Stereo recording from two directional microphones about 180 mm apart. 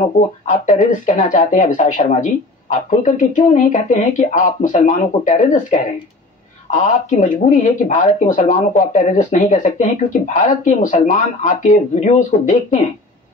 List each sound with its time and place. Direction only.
0.0 s speech: 45° left (ahead or behind)